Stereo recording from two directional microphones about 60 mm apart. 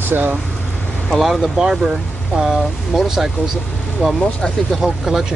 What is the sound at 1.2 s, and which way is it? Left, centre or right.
Speech, centre.